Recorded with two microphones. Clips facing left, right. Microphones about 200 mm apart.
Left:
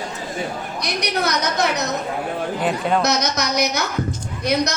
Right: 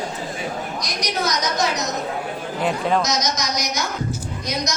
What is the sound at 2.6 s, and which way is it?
Chatter, centre (ahead or behind).